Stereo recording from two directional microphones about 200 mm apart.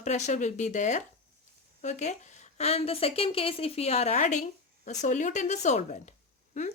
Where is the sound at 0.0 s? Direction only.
35° left (ahead or behind).